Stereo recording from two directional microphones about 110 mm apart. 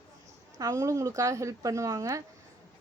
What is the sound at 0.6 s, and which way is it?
A woman's voice, 30° right (ahead or behind).